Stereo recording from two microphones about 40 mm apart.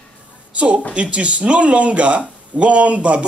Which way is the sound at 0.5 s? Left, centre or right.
Right.